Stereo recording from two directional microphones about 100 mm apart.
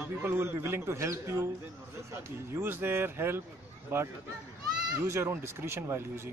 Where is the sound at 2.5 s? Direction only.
20° right (ahead or behind).